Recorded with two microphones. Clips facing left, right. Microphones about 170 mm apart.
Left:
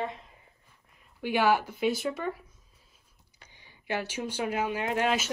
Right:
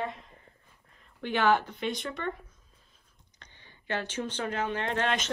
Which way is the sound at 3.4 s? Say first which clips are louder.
Left 1 dB; 10° left (ahead or behind).